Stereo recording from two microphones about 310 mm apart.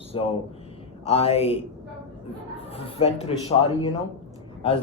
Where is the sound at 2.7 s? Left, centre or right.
Centre.